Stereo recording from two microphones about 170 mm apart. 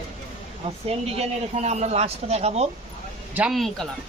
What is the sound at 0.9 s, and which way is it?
Speech, 35° right (ahead or behind).